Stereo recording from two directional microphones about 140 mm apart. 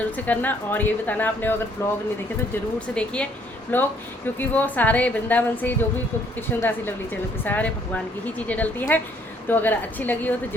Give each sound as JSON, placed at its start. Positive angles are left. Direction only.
{"t": 0.3, "sound": "speech", "side_deg": 15}
{"t": 2.9, "sound": "speech", "side_deg": 10}